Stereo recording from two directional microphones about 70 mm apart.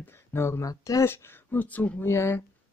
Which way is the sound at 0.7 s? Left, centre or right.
Left.